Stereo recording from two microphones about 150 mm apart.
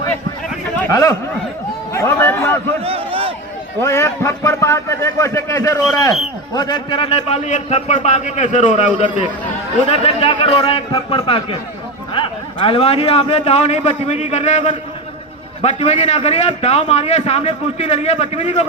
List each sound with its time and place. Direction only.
0.9 s speech: 20° left (ahead or behind)
2.8 s a sound: 40° right (ahead or behind)
3.8 s a man's voice: 20° left (ahead or behind); by 18.6 s 45° left (ahead or behind)